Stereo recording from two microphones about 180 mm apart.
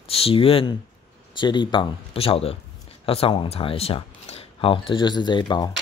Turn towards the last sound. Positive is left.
turn(degrees=25)  # may be behind; listen again after turning